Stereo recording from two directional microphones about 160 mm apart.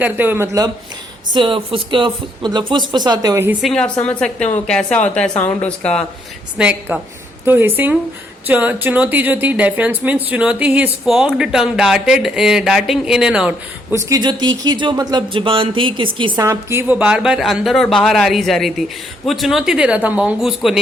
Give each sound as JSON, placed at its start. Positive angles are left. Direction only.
{"t": 0.0, "sound": "speech", "side_deg": -15}
{"t": 1.3, "sound": "speech", "side_deg": -30}
{"t": 3.6, "sound": "a woman's voice", "side_deg": 5}
{"t": 6.6, "sound": "a woman's voice", "side_deg": -10}
{"t": 13.9, "sound": "a woman's voice", "side_deg": -20}
{"t": 16.4, "sound": "a woman's voice", "side_deg": -15}